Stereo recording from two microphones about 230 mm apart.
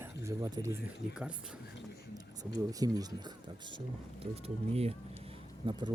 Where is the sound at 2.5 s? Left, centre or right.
Centre.